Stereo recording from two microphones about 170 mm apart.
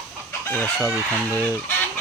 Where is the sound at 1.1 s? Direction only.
10° left (ahead or behind).